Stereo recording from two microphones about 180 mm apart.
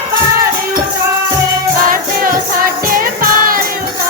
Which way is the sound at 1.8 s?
50° right (ahead or behind).